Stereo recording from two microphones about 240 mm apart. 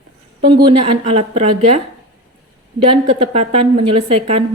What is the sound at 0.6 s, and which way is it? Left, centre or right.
A woman's voice, right.